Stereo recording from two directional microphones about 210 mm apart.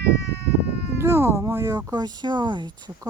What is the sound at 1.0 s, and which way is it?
Speech, 10° right (ahead or behind).